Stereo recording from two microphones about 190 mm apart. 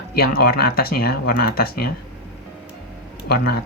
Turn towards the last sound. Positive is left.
turn(degrees=55)  # may be behind; listen again after turning